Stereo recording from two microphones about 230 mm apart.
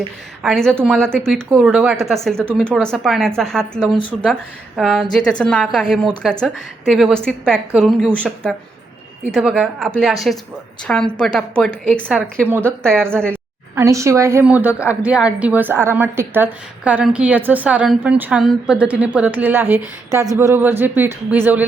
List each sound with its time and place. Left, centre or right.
0.4 s a woman's voice: centre
13.3 s speech: centre